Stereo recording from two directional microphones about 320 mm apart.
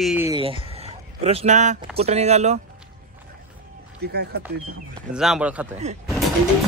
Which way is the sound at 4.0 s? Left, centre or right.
Right.